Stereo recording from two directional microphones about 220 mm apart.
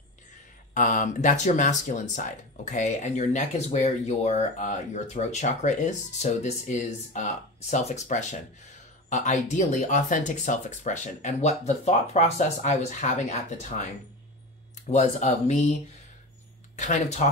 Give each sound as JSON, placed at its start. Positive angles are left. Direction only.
{"t": 0.7, "sound": "speech", "side_deg": 35}
{"t": 14.9, "sound": "speech", "side_deg": 30}
{"t": 16.7, "sound": "speech", "side_deg": 35}